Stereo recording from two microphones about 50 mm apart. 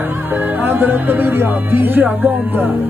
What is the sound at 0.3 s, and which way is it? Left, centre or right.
Speech, right.